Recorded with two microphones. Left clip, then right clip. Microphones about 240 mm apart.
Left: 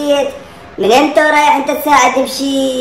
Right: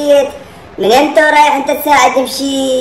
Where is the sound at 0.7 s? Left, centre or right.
Centre.